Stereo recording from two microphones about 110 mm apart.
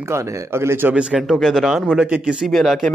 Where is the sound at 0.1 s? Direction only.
25° right (ahead or behind).